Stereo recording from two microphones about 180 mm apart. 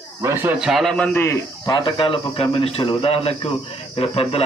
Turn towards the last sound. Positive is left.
turn(degrees=30)  # may be behind; listen again after turning